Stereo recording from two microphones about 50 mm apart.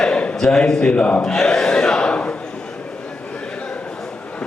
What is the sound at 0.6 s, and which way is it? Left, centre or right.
Speech, centre.